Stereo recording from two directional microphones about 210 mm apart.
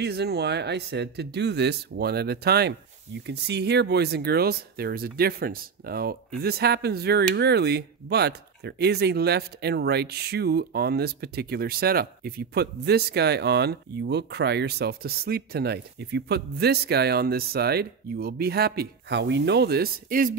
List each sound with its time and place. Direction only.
0.0 s speech: 50° right (ahead or behind)